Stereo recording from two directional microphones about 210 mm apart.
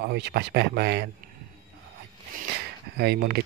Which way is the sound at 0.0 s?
50° right (ahead or behind).